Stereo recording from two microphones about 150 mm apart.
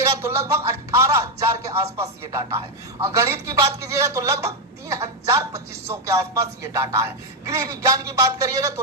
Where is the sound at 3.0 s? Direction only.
20° right (ahead or behind).